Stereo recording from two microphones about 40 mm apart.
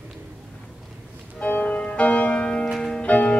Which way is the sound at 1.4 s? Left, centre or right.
Left.